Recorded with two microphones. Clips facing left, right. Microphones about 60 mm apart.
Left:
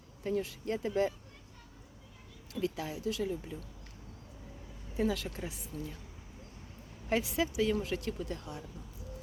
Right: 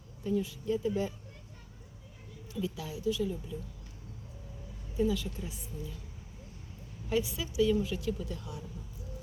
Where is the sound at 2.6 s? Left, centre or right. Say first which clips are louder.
Even; left.